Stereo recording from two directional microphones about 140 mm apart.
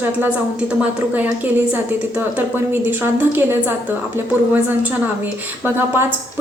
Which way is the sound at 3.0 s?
15° right (ahead or behind).